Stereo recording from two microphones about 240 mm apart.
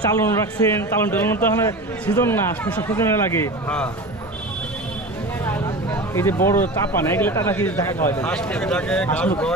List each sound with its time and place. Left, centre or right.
0.2 s speech: centre
5.4 s speech: centre